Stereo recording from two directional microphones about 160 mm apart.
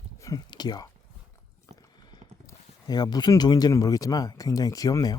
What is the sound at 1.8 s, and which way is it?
Speech, 25° left (ahead or behind).